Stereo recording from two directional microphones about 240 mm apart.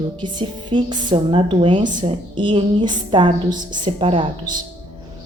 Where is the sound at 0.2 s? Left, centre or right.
Centre.